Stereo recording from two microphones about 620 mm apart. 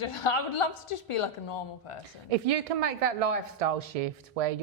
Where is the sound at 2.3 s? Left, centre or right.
Right.